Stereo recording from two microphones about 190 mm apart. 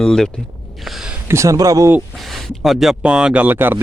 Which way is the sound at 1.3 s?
15° right (ahead or behind).